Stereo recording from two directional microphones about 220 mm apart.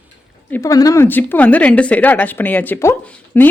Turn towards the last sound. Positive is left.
turn(degrees=10)  # may be behind; listen again after turning